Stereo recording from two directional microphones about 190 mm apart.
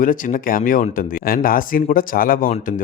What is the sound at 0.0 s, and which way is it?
Speech, 45° left (ahead or behind).